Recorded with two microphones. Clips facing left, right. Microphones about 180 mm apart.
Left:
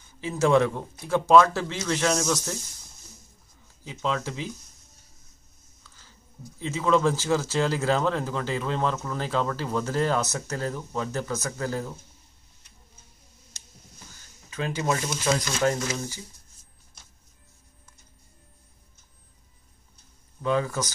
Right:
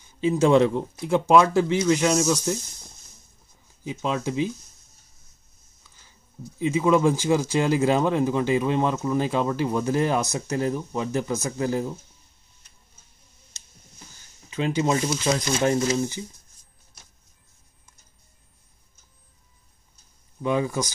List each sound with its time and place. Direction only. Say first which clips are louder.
0.2 s speech: right 4 dB; 20° right (ahead or behind)
3.8 s speech: right 3 dB; 15° right (ahead or behind)
6.6 s speech: right 3 dB; 15° right (ahead or behind)
14.5 s speech: right 4 dB; 20° right (ahead or behind)
20.4 s speech: right 2 dB; 15° right (ahead or behind)